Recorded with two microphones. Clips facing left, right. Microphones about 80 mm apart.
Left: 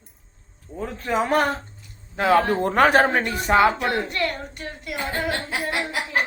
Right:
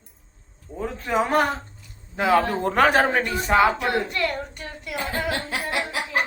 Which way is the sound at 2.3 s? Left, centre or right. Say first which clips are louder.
Left 1 dB; centre.